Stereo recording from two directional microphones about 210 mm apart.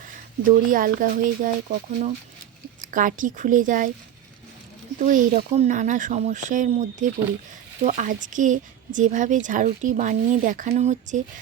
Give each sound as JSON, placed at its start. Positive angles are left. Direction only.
{"t": 0.4, "sound": "speech", "side_deg": -40}
{"t": 4.9, "sound": "speech", "side_deg": -40}